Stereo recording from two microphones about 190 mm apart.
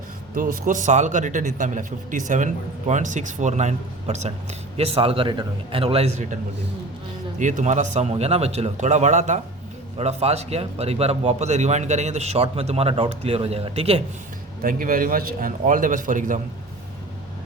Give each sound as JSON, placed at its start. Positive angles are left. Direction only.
{"t": 0.3, "sound": "a man's voice", "side_deg": -45}
{"t": 7.3, "sound": "a man's voice", "side_deg": -40}
{"t": 14.6, "sound": "a man's voice", "side_deg": -45}